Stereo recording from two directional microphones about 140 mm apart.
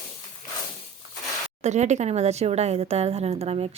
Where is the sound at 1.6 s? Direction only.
55° right (ahead or behind).